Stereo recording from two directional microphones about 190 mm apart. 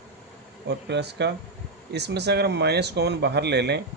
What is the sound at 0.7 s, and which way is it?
Speech, 60° right (ahead or behind).